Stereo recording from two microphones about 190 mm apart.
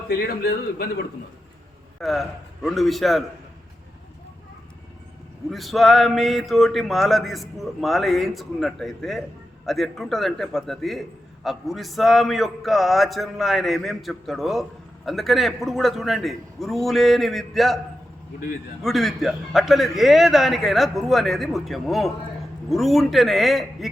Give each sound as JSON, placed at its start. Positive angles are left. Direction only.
{"t": 0.1, "sound": "a man's voice", "side_deg": 55}
{"t": 2.0, "sound": "a man's voice", "side_deg": 0}
{"t": 5.5, "sound": "a man's voice", "side_deg": 0}
{"t": 18.8, "sound": "a man's voice", "side_deg": 0}